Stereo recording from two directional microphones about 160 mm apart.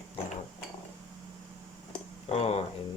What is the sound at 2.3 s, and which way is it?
Speech, 40° left (ahead or behind).